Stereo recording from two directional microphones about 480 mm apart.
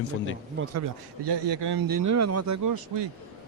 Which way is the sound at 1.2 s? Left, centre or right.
Right.